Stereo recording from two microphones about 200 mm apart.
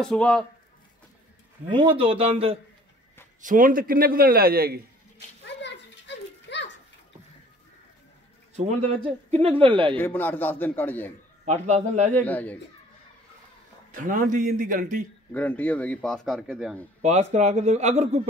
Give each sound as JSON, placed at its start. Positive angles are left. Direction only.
{"t": 0.0, "sound": "speech", "side_deg": 5}
{"t": 1.7, "sound": "speech", "side_deg": -25}
{"t": 3.3, "sound": "a man's voice", "side_deg": -40}
{"t": 5.4, "sound": "children playing", "side_deg": 60}
{"t": 8.5, "sound": "speech", "side_deg": -35}
{"t": 9.9, "sound": "a man's voice", "side_deg": 10}
{"t": 11.4, "sound": "a man's voice", "side_deg": -35}
{"t": 12.1, "sound": "a man's voice", "side_deg": 10}
{"t": 13.9, "sound": "a man's voice", "side_deg": -40}
{"t": 15.3, "sound": "speech", "side_deg": 10}
{"t": 17.0, "sound": "a man's voice", "side_deg": -35}